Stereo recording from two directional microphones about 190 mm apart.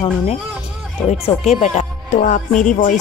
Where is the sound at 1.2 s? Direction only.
35° left (ahead or behind).